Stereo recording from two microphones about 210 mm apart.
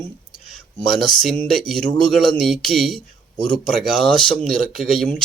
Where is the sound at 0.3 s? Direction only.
Centre (ahead or behind).